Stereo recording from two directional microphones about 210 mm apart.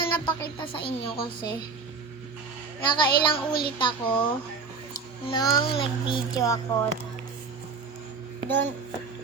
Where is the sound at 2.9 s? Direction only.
20° left (ahead or behind).